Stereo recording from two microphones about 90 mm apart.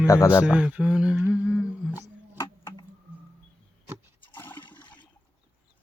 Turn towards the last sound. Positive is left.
turn(degrees=60)  # may be behind; listen again after turning